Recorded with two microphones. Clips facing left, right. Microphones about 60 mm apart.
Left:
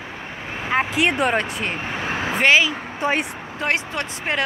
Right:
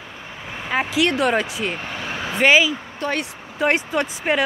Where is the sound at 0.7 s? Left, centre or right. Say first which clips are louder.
Left 1 dB; centre.